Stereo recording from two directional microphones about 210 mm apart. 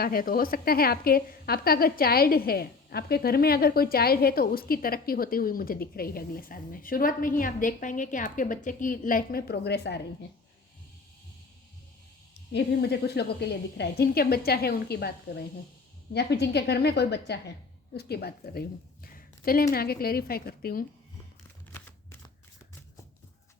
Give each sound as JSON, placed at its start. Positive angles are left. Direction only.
{"t": 0.0, "sound": "a woman's voice", "side_deg": 45}
{"t": 12.3, "sound": "a woman's voice", "side_deg": 50}
{"t": 16.1, "sound": "a woman's voice", "side_deg": 50}
{"t": 19.0, "sound": "a sound", "side_deg": 45}
{"t": 19.7, "sound": "a woman's voice", "side_deg": 45}
{"t": 21.7, "sound": "typewriter", "side_deg": 10}